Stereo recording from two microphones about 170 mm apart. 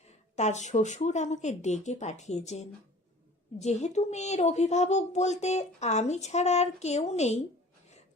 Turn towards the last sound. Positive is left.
turn(degrees=40)  # may be behind; listen again after turning